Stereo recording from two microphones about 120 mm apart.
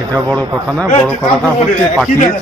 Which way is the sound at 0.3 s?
10° left (ahead or behind).